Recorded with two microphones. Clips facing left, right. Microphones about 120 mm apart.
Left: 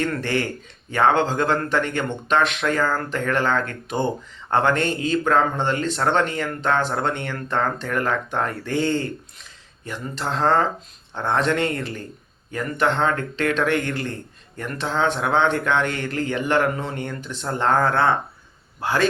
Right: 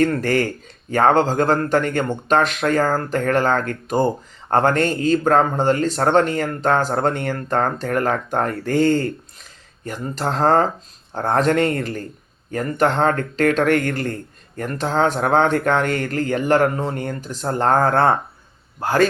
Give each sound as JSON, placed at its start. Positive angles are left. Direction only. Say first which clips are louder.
{"t": 0.0, "sound": "speech", "louder": "right 6 dB", "side_deg": -40}